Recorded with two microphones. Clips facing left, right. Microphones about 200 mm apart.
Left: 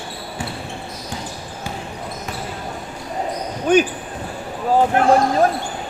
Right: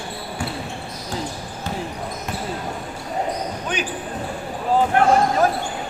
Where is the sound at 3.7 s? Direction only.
50° left (ahead or behind).